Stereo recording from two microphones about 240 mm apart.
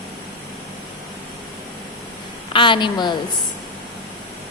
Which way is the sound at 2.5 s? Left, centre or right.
Centre.